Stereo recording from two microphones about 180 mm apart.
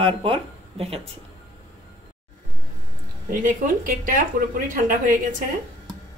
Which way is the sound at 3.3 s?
50° right (ahead or behind).